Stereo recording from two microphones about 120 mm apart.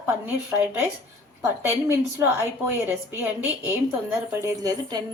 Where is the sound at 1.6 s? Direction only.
20° right (ahead or behind).